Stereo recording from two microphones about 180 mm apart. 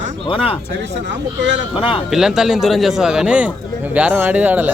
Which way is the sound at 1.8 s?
30° left (ahead or behind).